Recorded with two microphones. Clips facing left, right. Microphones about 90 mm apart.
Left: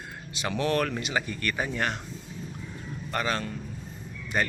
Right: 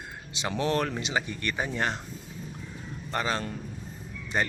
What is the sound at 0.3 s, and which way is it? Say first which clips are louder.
Speech: left 1 dB; 20° right (ahead or behind).